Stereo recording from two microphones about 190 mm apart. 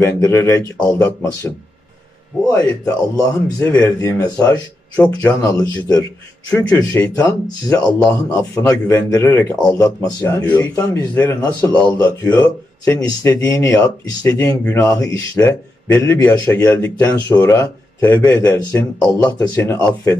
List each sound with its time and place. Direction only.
0.0 s speech: 10° left (ahead or behind)
8.0 s a man's voice: 5° left (ahead or behind)
8.4 s speech: 20° left (ahead or behind)